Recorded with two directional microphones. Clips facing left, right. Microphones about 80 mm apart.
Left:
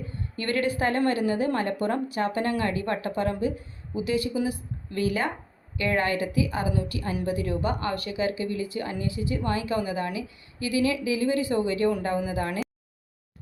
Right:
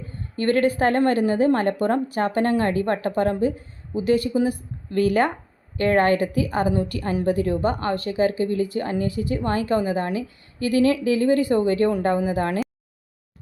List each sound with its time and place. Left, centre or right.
0.3 s a woman's voice: right
5.7 s a woman's voice: right